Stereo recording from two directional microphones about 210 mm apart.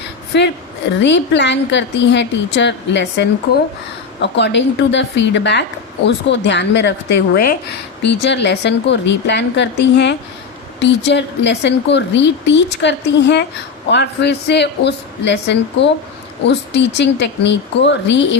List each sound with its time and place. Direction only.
0.3 s a woman's voice: 55° left (ahead or behind)